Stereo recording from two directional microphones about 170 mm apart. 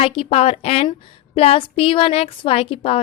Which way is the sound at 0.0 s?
35° left (ahead or behind).